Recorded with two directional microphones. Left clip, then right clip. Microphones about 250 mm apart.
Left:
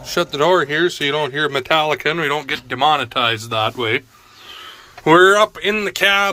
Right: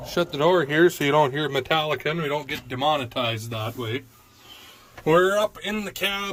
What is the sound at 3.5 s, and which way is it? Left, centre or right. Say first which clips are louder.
Speech: left 12 dB; left.